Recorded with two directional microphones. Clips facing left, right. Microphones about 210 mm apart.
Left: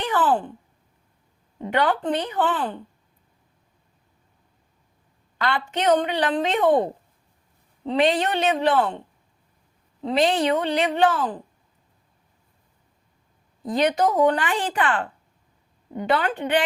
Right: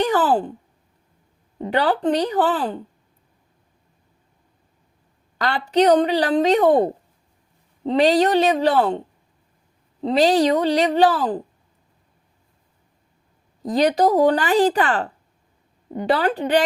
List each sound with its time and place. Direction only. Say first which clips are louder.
0.0 s speech: right 4 dB; 40° right (ahead or behind)
1.6 s speech: right 3 dB; 35° right (ahead or behind)
5.4 s speech: right 7 dB; 40° right (ahead or behind)
7.9 s speech: right 5 dB; 40° right (ahead or behind)
10.0 s speech: right 4 dB; 40° right (ahead or behind)
13.6 s speech: right 3 dB; 40° right (ahead or behind)